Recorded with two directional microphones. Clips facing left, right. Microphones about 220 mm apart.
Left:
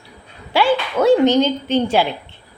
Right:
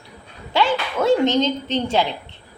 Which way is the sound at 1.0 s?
25° right (ahead or behind).